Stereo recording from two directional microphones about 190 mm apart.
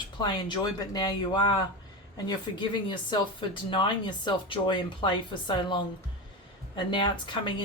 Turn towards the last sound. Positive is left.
turn(degrees=25)  # may be behind; listen again after turning